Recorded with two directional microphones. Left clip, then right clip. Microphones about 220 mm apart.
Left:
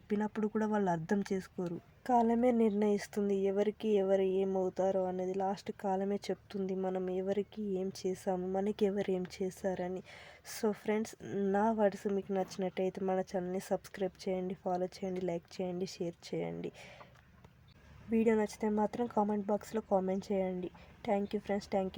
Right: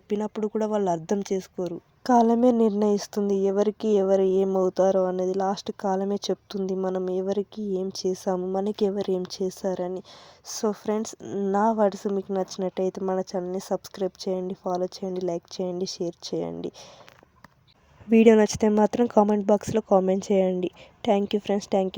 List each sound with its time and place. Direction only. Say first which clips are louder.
0.1 s speech: right 8 dB; 20° right (ahead or behind)
18.1 s speech: right 14 dB; 35° right (ahead or behind)